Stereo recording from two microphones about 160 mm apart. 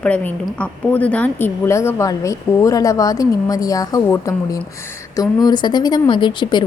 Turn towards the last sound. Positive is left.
turn(degrees=30)  # may be behind; listen again after turning